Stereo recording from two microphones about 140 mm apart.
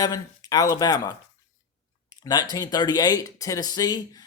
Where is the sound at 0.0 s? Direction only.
30° left (ahead or behind).